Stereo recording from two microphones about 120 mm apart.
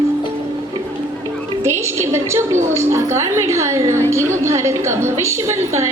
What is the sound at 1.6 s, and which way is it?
A woman's voice, 20° right (ahead or behind).